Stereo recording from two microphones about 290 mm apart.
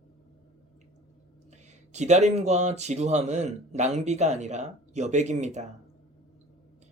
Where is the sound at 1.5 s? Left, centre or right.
Right.